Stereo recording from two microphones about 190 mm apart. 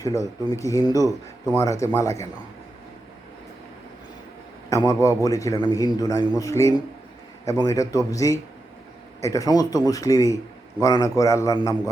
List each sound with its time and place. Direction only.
0.0 s a man's voice: 15° left (ahead or behind)
4.7 s a man's voice: 15° left (ahead or behind)